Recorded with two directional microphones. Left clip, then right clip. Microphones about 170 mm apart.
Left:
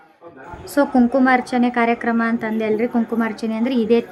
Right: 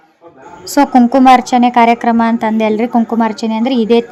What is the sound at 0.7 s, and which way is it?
A woman's voice, 40° right (ahead or behind).